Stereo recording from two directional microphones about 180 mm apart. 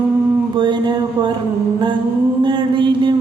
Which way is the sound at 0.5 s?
25° right (ahead or behind).